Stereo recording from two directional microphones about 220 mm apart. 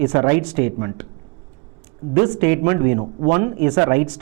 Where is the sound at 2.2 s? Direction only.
15° right (ahead or behind).